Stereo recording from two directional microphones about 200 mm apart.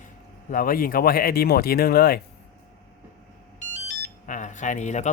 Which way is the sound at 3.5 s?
35° left (ahead or behind).